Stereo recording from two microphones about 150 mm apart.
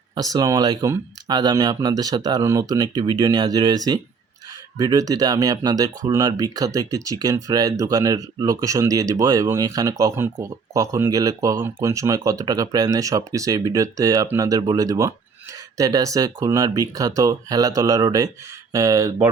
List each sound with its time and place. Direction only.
0.2 s speech: 25° right (ahead or behind)